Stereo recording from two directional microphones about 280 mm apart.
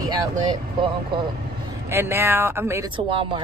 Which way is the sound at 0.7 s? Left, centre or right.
Centre.